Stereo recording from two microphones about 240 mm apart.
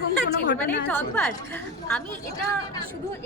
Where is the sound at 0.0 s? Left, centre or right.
Left.